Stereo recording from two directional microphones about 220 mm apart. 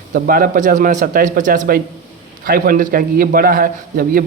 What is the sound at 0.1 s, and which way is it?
A man's voice, 40° right (ahead or behind).